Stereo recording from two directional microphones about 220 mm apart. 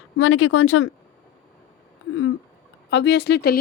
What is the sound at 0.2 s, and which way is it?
Speech, 70° left (ahead or behind).